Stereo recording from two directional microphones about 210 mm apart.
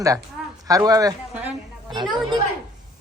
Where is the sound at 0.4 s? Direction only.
Centre (ahead or behind).